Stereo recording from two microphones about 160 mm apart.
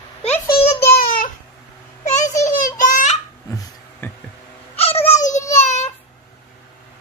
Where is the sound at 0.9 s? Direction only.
65° left (ahead or behind).